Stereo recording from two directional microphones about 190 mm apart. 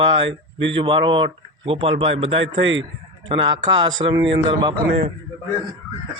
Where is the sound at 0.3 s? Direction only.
80° right.